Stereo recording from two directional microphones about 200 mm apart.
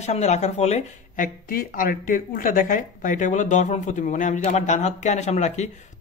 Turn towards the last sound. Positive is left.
turn(degrees=35)  # may be behind; listen again after turning